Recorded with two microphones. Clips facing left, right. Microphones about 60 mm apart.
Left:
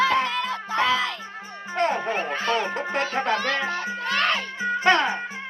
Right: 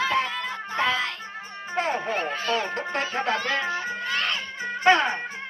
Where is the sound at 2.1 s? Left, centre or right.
Left.